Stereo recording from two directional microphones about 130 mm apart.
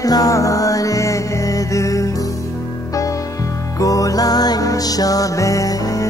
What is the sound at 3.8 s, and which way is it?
Music, 25° left (ahead or behind).